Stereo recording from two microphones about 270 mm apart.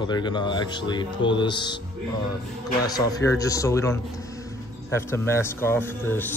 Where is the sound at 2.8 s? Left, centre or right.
Centre.